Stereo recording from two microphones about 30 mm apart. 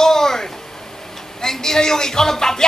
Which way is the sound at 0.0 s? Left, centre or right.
Centre.